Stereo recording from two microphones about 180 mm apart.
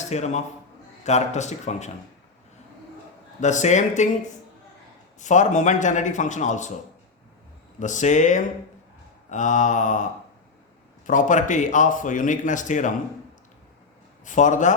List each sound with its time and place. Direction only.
0.1 s speech: 40° left (ahead or behind)
3.4 s speech: 40° left (ahead or behind)
5.2 s speech: 45° left (ahead or behind)
7.8 s speech: 45° left (ahead or behind)
14.3 s speech: 45° left (ahead or behind)